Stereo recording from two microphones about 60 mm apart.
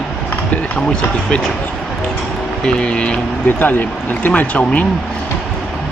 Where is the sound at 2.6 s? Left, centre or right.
Centre.